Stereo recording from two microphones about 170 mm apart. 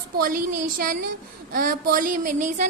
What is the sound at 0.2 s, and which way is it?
Speech, 55° right (ahead or behind).